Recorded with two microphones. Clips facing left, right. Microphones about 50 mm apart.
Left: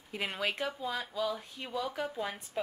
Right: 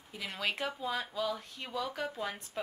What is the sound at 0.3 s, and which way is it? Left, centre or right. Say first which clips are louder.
Speech: right 1 dB; centre.